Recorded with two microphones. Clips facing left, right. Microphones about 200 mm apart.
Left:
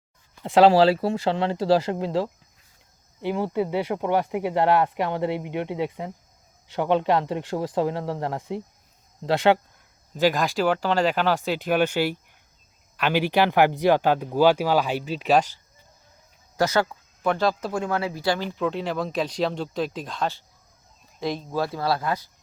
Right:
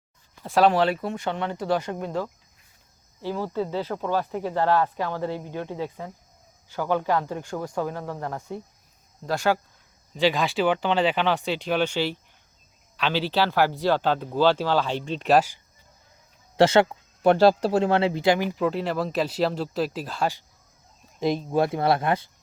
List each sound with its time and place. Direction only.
0.4 s speech: 25° left (ahead or behind)
10.2 s speech: centre (ahead or behind)
16.6 s speech: 25° right (ahead or behind)